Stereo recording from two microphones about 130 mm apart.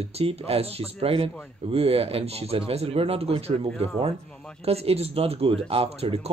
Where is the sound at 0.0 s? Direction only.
45° right (ahead or behind).